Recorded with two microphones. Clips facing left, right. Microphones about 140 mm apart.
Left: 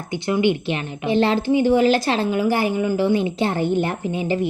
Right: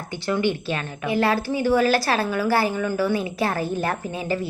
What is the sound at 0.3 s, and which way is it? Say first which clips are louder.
A woman's voice: left 3 dB; 20° left (ahead or behind).